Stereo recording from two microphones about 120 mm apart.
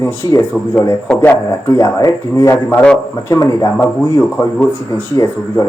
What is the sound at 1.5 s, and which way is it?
A man's voice, 30° left (ahead or behind).